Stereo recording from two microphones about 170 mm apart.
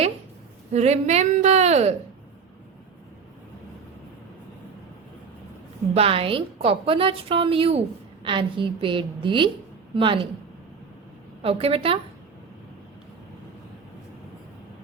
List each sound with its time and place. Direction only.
0.7 s a woman's voice: 40° right (ahead or behind)
5.9 s a woman's voice: 35° right (ahead or behind)
11.4 s a woman's voice: 35° right (ahead or behind)